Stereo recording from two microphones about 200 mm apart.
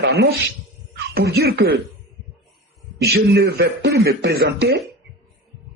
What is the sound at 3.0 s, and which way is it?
Speech, 55° right (ahead or behind).